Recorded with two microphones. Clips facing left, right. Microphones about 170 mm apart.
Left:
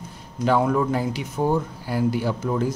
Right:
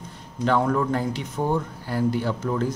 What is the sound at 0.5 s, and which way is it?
A man's voice, 10° left (ahead or behind).